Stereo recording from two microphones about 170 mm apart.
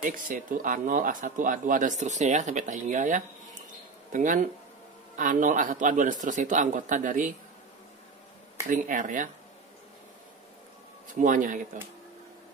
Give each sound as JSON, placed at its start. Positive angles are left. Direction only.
{"t": 0.0, "sound": "speech", "side_deg": -50}
{"t": 8.6, "sound": "speech", "side_deg": -50}
{"t": 11.1, "sound": "speech", "side_deg": -50}